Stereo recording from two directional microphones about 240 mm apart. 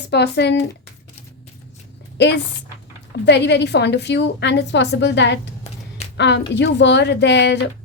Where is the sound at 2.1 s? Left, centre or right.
Left.